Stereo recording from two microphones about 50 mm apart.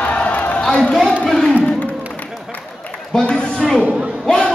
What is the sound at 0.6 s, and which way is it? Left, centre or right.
Speech, centre.